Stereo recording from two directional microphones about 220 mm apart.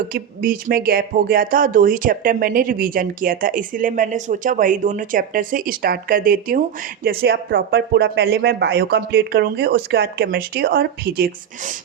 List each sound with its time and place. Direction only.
0.1 s speech: 40° right (ahead or behind)